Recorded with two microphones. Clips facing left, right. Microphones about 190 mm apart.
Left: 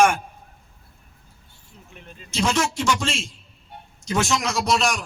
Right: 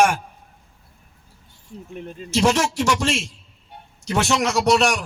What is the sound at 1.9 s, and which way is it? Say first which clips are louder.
Speech: right 11 dB; 45° right (ahead or behind).